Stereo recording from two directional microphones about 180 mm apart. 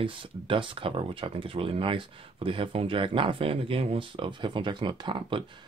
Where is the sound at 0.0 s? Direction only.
30° right (ahead or behind).